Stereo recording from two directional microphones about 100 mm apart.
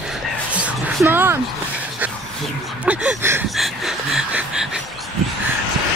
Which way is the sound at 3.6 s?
5° right (ahead or behind).